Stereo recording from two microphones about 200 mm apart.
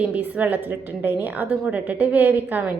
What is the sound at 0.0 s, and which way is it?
A woman's voice, 5° right (ahead or behind).